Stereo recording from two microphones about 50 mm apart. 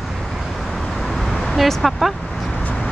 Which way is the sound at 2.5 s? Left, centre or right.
Left.